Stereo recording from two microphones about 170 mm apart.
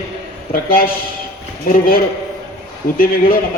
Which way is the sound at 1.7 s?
60° left (ahead or behind).